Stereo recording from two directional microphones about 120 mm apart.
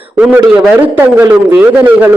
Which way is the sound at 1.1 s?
15° right (ahead or behind).